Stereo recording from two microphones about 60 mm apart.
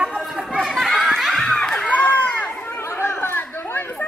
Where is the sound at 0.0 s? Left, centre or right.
Centre.